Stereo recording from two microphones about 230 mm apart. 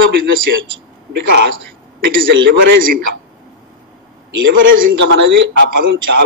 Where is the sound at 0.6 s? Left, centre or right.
Right.